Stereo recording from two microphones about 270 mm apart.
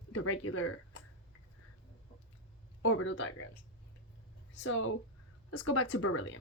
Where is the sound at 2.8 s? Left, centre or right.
Left.